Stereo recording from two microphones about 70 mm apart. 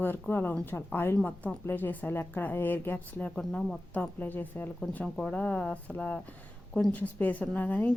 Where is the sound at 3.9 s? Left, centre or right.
Left.